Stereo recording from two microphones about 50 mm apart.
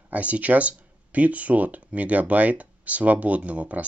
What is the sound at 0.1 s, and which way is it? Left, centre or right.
Speech, right.